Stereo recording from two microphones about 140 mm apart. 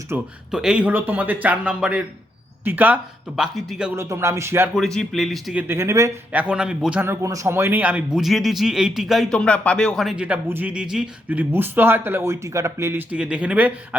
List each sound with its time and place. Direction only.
0.1 s a man's voice: 15° right (ahead or behind)
3.9 s speech: 20° right (ahead or behind)
4.7 s speech: 5° left (ahead or behind)
5.6 s speech: 20° right (ahead or behind)
6.3 s a man's voice: 5° right (ahead or behind)
7.0 s a man's voice: 20° right (ahead or behind)